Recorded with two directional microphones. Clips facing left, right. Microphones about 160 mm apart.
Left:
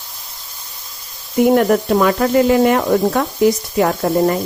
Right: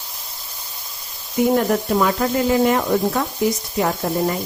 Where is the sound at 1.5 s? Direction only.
65° left (ahead or behind).